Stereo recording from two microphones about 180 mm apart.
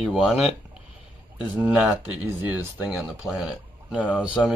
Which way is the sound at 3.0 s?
Centre (ahead or behind).